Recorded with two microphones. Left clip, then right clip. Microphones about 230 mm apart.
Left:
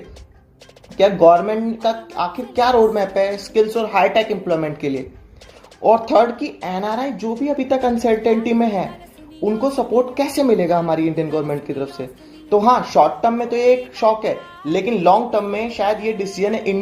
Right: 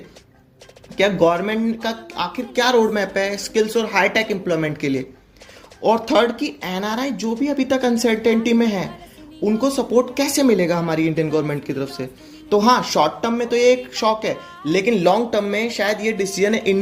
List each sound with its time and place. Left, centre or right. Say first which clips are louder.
0.9 s speech: left 5 dB; right